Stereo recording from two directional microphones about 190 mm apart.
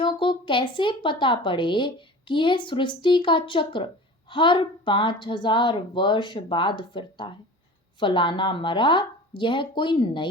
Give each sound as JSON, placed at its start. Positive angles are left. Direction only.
{"t": 0.0, "sound": "a woman's voice", "side_deg": 25}